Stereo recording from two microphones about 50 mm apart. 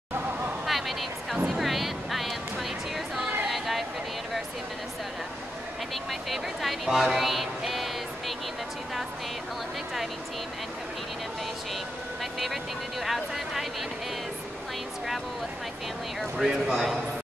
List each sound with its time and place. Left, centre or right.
0.7 s music: centre
3.4 s a sound: centre
6.3 s speech: centre
7.2 s music: centre
12.2 s vehicle: centre
13.0 s speech: centre
16.2 s speech: centre